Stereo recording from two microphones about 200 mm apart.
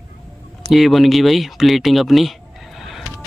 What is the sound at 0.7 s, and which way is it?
Speech, centre (ahead or behind).